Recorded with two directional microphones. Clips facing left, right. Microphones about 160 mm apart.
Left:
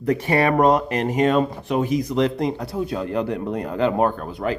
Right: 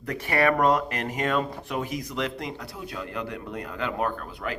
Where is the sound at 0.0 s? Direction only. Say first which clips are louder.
Left 5 dB; 25° left (ahead or behind).